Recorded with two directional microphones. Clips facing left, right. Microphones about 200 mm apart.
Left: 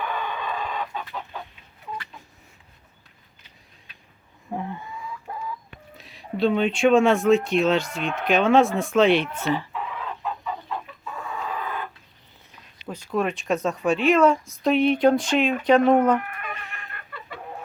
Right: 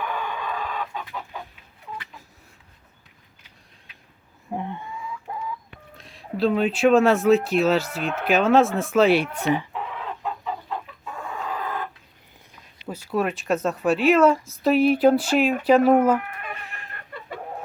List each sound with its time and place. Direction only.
0.0 s chicken: 10° right (ahead or behind)
4.5 s chicken: centre (ahead or behind)
5.3 s a sound: 20° right (ahead or behind)
6.0 s speech: centre (ahead or behind); by 9.6 s 15° right (ahead or behind)
12.8 s speech: 5° right (ahead or behind)
16.7 s chicken: 35° right (ahead or behind)